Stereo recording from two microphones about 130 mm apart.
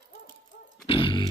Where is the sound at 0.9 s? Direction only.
40° left (ahead or behind).